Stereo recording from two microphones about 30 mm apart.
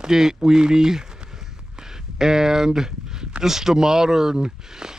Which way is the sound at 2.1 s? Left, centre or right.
Centre.